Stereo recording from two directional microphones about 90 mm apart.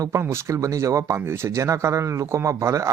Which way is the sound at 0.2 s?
30° right (ahead or behind).